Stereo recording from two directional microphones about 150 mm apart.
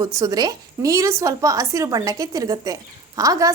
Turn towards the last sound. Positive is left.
turn(degrees=-25)  # may be behind; listen again after turning